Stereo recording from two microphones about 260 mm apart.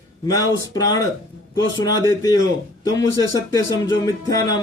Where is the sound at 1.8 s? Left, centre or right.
Centre.